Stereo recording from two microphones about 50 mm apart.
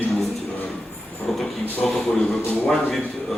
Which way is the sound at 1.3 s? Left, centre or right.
Centre.